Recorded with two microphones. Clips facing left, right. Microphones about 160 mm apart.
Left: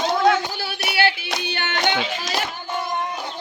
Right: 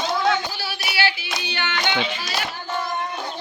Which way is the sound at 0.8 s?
55° left (ahead or behind).